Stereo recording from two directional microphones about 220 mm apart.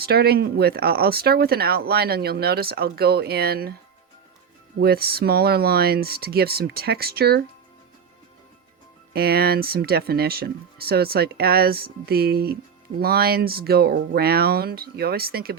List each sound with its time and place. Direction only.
0.0 s speech: 45° right (ahead or behind)
4.8 s speech: 45° right (ahead or behind)
9.1 s speech: 45° right (ahead or behind)